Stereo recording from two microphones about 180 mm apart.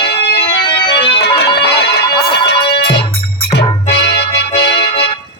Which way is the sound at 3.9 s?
70° left (ahead or behind).